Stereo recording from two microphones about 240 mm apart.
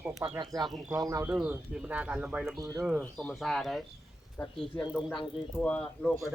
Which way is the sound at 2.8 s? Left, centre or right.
Centre.